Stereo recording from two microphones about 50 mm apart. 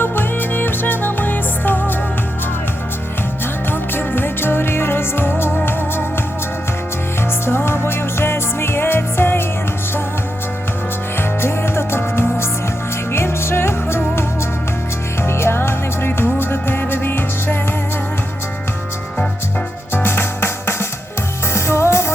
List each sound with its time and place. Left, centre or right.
0.0 s music: left
3.7 s music: left
7.4 s music: left
11.2 s music: left
19.9 s music: left